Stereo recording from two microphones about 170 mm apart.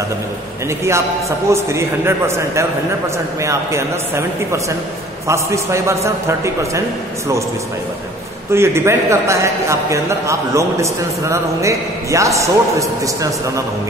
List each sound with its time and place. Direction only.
0.7 s a man's voice: 15° right (ahead or behind)
8.5 s a man's voice: 15° right (ahead or behind)